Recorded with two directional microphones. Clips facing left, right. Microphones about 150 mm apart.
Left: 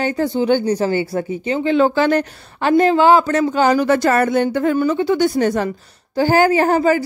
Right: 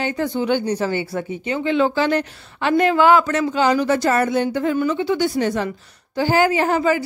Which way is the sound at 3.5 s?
45° left (ahead or behind).